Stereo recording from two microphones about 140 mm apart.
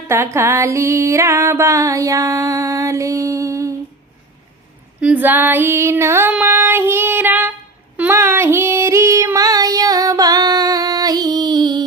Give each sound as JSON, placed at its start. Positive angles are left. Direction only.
{"t": 0.1, "sound": "music", "side_deg": -20}
{"t": 4.9, "sound": "female singing", "side_deg": -10}
{"t": 6.3, "sound": "child singing", "side_deg": -15}
{"t": 7.9, "sound": "female singing", "side_deg": -15}